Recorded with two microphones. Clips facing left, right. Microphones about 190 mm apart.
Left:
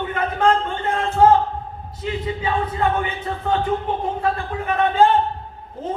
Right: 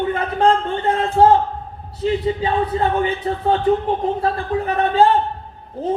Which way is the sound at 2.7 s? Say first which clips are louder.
Right 3 dB; 35° right (ahead or behind).